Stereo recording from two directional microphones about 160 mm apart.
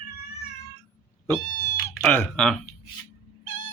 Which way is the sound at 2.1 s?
10° left (ahead or behind).